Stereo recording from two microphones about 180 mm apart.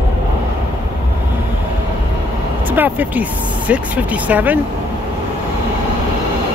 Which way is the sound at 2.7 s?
10° right (ahead or behind).